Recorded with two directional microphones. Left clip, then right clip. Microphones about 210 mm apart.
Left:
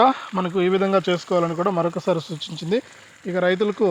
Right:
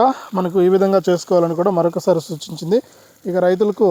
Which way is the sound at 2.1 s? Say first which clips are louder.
Right 6 dB; 25° right (ahead or behind).